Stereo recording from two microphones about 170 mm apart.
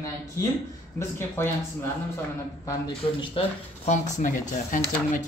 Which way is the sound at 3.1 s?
35° left (ahead or behind).